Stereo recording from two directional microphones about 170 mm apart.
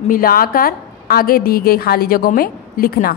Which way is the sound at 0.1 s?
60° left (ahead or behind).